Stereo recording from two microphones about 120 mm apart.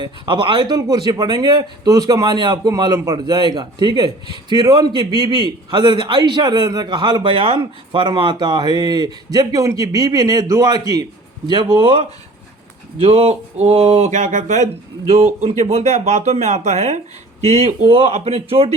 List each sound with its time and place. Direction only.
0.0 s speech: 40° right (ahead or behind); by 17.0 s 70° right (ahead or behind)
17.6 s speech: 55° right (ahead or behind)